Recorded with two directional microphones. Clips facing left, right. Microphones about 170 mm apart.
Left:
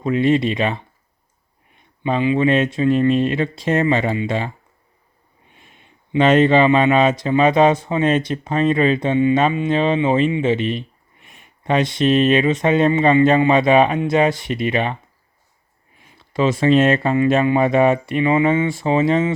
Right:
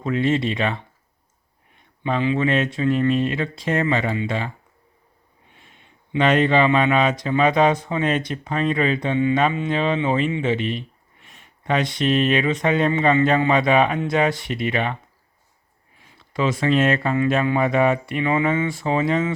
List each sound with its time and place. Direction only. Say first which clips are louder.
0.0 s speech: left 4 dB; 15° left (ahead or behind)
2.0 s speech: left 4 dB; 15° left (ahead or behind)
6.1 s speech: left 4 dB; 25° left (ahead or behind)
16.3 s speech: left 5 dB; 25° left (ahead or behind)